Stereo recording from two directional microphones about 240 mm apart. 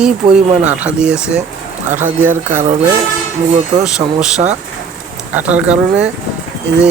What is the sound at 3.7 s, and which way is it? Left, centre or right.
Speech, right.